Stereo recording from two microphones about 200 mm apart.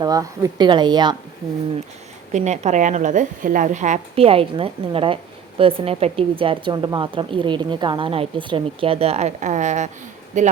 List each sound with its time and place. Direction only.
0.0 s a woman's voice: 15° right (ahead or behind)
2.3 s a woman's voice: 35° right (ahead or behind)